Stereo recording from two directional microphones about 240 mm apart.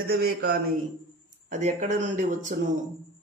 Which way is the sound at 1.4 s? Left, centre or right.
Right.